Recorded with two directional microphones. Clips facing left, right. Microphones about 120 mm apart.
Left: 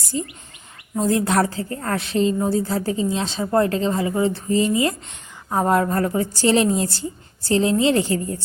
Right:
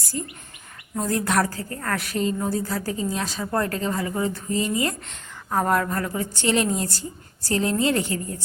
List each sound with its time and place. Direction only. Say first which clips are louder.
0.1 s speech: left 5 dB; 10° left (ahead or behind)
1.0 s a woman's voice: left 4 dB; 25° left (ahead or behind)
5.9 s a woman's voice: left 6 dB; 35° left (ahead or behind)